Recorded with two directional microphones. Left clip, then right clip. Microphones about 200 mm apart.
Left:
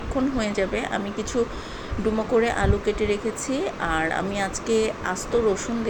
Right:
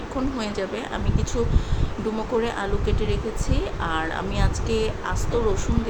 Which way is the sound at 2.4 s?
15° left (ahead or behind).